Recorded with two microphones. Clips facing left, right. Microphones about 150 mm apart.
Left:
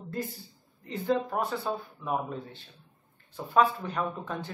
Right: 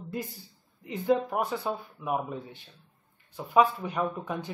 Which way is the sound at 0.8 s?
15° right (ahead or behind).